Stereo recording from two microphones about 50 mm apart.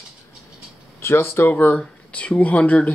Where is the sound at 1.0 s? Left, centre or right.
Left.